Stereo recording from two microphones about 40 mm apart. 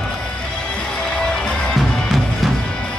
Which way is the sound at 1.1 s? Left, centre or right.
Left.